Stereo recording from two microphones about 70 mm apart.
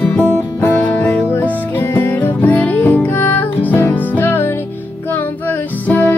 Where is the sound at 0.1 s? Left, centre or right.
Left.